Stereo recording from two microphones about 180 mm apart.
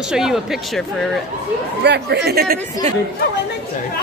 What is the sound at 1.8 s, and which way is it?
Speech, 70° right (ahead or behind).